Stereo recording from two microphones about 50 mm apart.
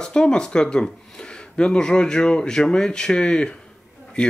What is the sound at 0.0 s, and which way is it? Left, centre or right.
Speech, centre.